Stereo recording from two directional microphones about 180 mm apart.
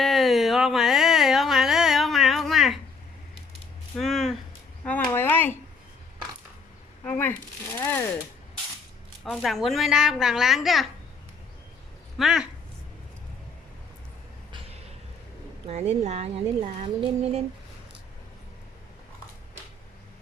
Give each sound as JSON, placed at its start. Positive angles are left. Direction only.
{"t": 0.0, "sound": "a sound", "side_deg": 0}
{"t": 3.9, "sound": "speech", "side_deg": 0}
{"t": 4.8, "sound": "a sound", "side_deg": 10}
{"t": 7.0, "sound": "shuffling cards", "side_deg": 10}
{"t": 9.2, "sound": "a child's voice", "side_deg": 0}
{"t": 12.1, "sound": "speech", "side_deg": 0}
{"t": 15.6, "sound": "speech", "side_deg": -35}